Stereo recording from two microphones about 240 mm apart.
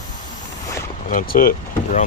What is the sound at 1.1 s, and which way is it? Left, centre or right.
Speech, left.